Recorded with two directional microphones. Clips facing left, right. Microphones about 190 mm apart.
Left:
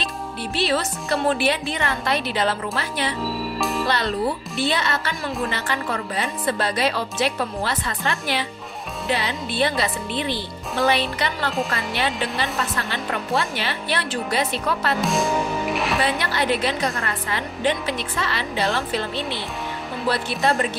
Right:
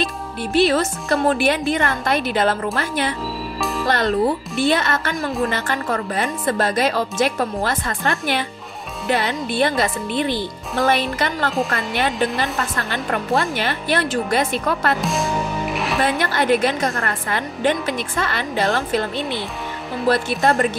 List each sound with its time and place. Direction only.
0.0 s speech: 50° right (ahead or behind)
3.5 s music: centre (ahead or behind)
3.8 s speech: 50° right (ahead or behind)
15.0 s music: centre (ahead or behind)
16.0 s speech: 50° right (ahead or behind)